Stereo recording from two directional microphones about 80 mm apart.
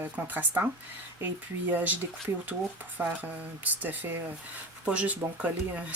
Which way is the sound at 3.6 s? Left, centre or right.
Right.